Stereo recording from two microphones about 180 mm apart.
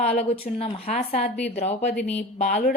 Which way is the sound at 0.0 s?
35° left (ahead or behind).